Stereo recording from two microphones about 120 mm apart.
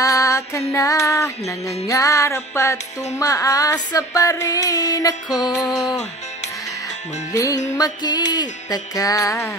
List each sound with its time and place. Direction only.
0.0 s female singing: 25° left (ahead or behind)
1.4 s music: 60° left (ahead or behind)
1.9 s music: 25° left (ahead or behind)
7.3 s music: 30° left (ahead or behind)